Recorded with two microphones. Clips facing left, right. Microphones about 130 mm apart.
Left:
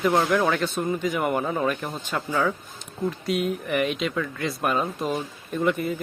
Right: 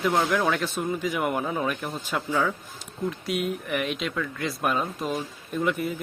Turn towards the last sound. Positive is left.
turn(degrees=0)  # may be behind; listen again after turning